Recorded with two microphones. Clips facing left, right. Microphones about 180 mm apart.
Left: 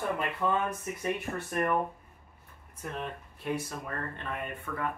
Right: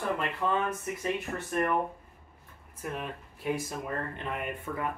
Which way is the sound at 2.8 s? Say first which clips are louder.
Right 1 dB; 5° right (ahead or behind).